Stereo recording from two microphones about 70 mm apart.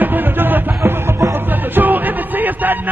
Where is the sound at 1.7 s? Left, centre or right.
Right.